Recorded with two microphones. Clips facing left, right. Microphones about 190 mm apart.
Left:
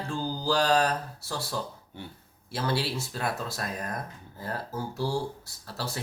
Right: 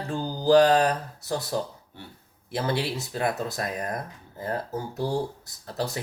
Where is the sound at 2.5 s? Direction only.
20° right (ahead or behind).